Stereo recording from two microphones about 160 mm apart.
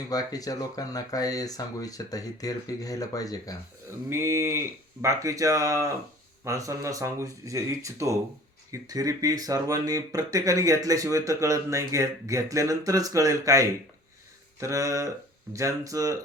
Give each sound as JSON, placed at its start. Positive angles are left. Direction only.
{"t": 0.1, "sound": "speech", "side_deg": 25}
{"t": 4.1, "sound": "speech", "side_deg": -15}